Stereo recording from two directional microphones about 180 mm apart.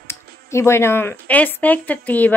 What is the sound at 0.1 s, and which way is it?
A woman's voice, 15° left (ahead or behind).